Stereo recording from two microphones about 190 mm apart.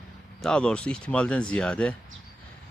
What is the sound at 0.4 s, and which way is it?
Speech, 5° left (ahead or behind).